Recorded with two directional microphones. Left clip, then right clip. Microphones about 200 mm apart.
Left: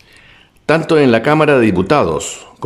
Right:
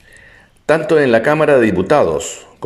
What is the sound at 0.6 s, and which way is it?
A man's voice, 15° left (ahead or behind).